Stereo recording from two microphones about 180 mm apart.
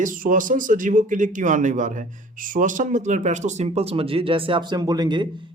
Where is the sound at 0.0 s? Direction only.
45° right (ahead or behind).